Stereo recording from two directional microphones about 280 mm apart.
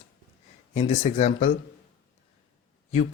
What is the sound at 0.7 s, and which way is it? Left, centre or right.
Speech, left.